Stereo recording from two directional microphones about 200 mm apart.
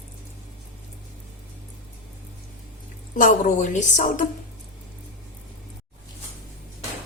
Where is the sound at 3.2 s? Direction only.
40° left (ahead or behind).